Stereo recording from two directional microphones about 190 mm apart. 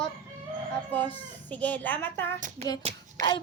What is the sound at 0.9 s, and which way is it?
A woman's voice, 10° left (ahead or behind).